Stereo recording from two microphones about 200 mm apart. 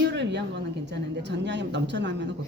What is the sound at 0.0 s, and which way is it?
Speech, 60° right (ahead or behind).